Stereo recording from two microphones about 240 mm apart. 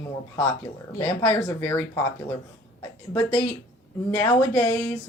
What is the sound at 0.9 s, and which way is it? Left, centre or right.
Speech, centre.